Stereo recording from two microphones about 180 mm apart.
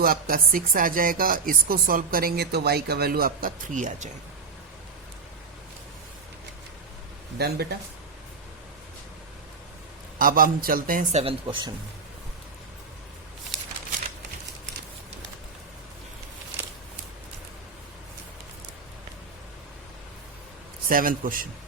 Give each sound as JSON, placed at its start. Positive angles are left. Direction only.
{"t": 0.0, "sound": "speech", "side_deg": -55}
{"t": 7.3, "sound": "speech", "side_deg": -60}
{"t": 10.2, "sound": "speech", "side_deg": -50}
{"t": 11.2, "sound": "speech", "side_deg": -30}
{"t": 20.9, "sound": "speech", "side_deg": -50}